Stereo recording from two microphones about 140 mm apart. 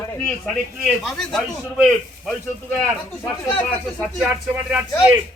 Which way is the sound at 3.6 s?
10° left (ahead or behind).